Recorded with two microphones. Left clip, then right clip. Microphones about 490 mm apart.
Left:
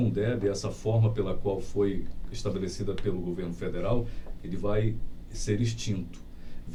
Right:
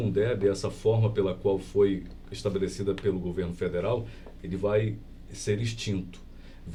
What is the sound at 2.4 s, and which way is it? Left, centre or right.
Speech, right.